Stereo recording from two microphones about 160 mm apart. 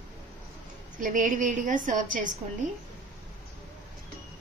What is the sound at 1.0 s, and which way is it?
A woman's voice, 55° right (ahead or behind).